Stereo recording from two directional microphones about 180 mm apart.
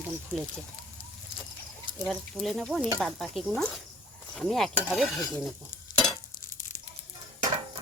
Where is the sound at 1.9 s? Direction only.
Centre (ahead or behind).